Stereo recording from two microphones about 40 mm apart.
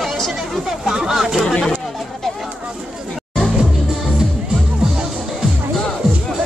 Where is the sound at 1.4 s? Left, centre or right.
Centre.